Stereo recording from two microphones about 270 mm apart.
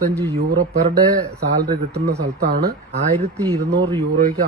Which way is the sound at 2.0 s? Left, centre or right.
Right.